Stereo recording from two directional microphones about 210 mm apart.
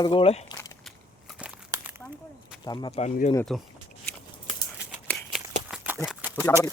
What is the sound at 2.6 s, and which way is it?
Speech, 20° left (ahead or behind).